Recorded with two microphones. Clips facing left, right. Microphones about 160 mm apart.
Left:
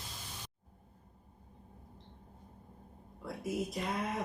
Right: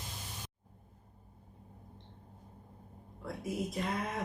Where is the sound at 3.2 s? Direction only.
Centre (ahead or behind).